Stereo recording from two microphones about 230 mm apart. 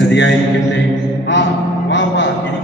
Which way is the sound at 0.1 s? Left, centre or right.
Left.